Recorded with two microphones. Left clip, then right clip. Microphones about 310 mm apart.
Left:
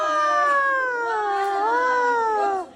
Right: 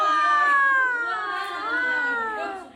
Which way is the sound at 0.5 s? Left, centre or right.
Centre.